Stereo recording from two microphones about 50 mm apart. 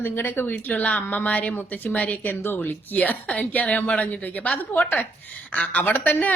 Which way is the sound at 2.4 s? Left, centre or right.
Left.